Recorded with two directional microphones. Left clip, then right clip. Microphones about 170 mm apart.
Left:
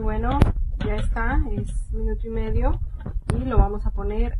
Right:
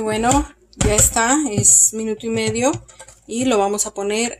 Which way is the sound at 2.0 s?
25° right (ahead or behind).